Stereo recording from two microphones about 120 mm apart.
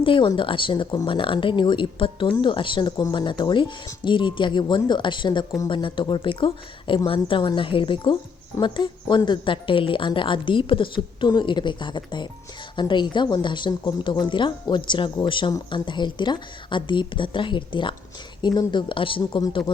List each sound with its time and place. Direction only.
0.0 s a woman's voice: 45° left (ahead or behind)